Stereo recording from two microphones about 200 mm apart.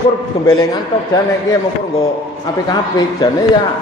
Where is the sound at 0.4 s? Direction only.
20° left (ahead or behind).